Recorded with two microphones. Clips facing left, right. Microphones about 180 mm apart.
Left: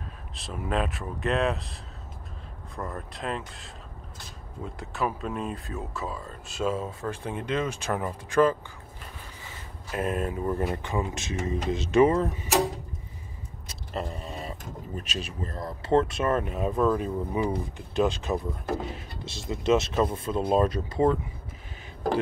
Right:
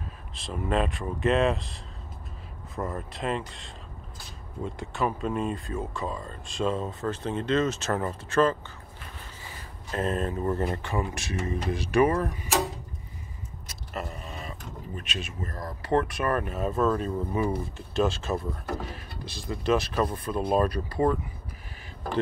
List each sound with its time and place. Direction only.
0.3 s speech: centre (ahead or behind)
9.8 s speech: 10° left (ahead or behind)
13.7 s vehicle: 30° left (ahead or behind)
15.0 s speech: 35° left (ahead or behind)